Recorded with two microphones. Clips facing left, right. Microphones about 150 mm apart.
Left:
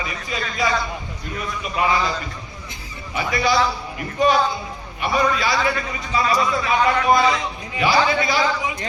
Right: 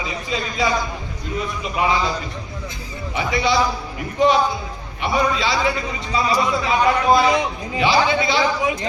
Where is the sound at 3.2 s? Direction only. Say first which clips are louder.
Even; 20° right (ahead or behind).